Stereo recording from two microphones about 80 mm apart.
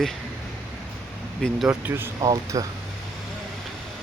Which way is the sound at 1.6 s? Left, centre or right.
Right.